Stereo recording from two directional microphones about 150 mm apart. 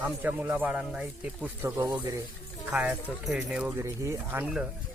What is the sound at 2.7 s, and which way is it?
Speech, 5° right (ahead or behind).